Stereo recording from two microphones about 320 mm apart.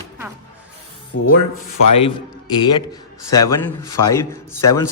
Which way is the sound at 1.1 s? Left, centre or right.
Left.